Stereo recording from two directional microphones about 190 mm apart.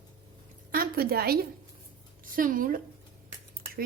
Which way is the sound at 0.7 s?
50° right (ahead or behind).